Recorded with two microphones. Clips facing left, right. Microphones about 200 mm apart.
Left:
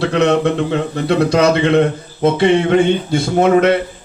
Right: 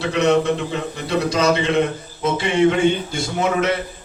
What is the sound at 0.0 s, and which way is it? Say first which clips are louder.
A man's voice: left 3 dB; 60° left (ahead or behind).